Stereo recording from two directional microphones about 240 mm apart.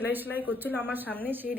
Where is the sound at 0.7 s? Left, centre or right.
Centre.